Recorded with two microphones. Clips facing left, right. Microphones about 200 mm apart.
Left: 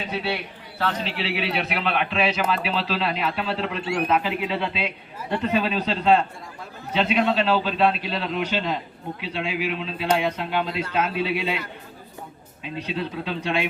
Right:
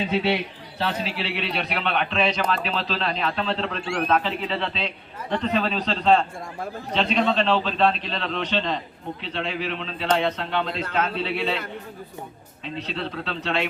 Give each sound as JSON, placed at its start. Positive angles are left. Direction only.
{"t": 0.3, "sound": "a man's voice", "side_deg": -20}
{"t": 0.9, "sound": "a man's voice", "side_deg": 0}
{"t": 12.6, "sound": "a man's voice", "side_deg": 10}